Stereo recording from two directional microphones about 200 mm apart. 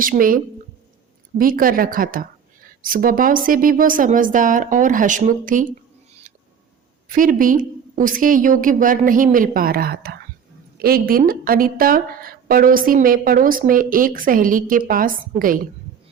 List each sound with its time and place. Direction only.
0.0 s a woman's voice: 45° right (ahead or behind)
1.4 s a woman's voice: 45° right (ahead or behind)
7.1 s a woman's voice: 40° right (ahead or behind)